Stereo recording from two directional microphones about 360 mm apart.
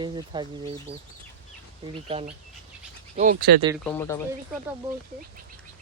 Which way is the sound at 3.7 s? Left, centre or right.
Centre.